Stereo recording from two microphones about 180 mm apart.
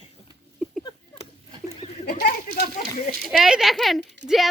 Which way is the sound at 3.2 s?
5° right (ahead or behind).